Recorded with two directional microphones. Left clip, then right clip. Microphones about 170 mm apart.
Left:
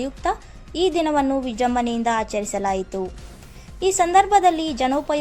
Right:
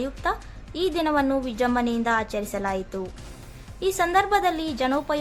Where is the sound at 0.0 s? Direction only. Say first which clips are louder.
Left 3 dB; 15° left (ahead or behind).